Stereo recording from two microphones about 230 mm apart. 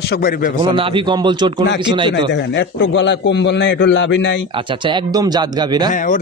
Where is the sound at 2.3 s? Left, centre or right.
Left.